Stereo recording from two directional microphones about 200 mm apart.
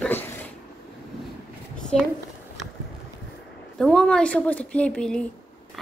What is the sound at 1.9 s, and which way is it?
Speech, 5° left (ahead or behind).